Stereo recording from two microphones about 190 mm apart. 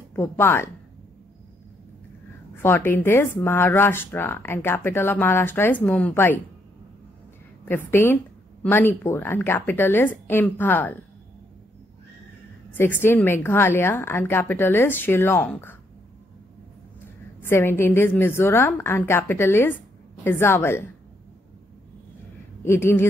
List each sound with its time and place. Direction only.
0.1 s speech: 10° left (ahead or behind)
2.5 s speech: 10° left (ahead or behind)
7.9 s speech: 10° left (ahead or behind)
12.7 s speech: 10° left (ahead or behind)
17.4 s speech: 10° left (ahead or behind)
22.7 s speech: 10° left (ahead or behind)